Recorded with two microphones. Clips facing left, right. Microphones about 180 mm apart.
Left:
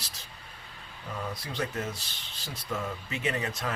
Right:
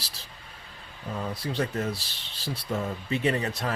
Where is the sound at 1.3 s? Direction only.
30° right (ahead or behind).